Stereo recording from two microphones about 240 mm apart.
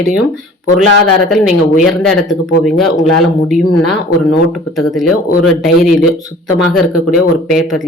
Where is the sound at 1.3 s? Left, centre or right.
Centre.